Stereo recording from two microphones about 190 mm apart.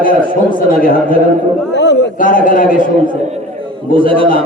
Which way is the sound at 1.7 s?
65° left (ahead or behind).